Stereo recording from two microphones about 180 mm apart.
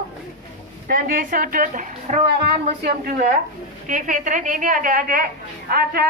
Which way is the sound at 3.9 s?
45° right (ahead or behind).